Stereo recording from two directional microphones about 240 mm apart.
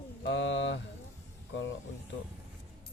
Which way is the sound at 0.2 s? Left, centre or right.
Left.